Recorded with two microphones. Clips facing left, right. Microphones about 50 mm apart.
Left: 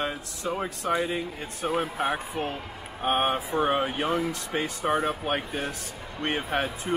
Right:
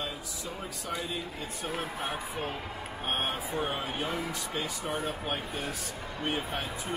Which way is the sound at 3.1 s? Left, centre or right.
Left.